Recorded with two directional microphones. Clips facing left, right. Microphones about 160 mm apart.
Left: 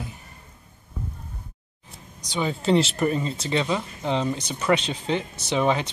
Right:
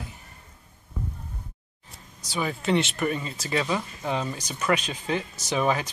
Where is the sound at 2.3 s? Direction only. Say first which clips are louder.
Left 3 dB; 25° left (ahead or behind).